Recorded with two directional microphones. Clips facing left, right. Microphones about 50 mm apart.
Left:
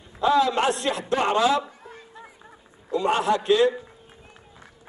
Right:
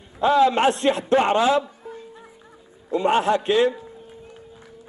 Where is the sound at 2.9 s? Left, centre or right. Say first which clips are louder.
Right 3 dB; right.